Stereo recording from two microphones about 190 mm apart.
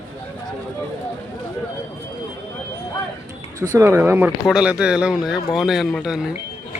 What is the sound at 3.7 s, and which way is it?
Speech, 15° right (ahead or behind).